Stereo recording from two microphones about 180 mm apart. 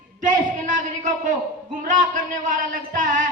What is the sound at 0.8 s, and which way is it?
A man's voice, 45° right (ahead or behind).